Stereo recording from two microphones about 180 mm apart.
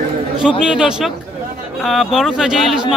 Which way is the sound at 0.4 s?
5° right (ahead or behind).